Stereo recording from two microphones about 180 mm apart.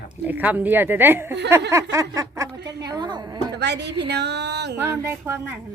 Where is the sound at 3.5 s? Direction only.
70° right (ahead or behind).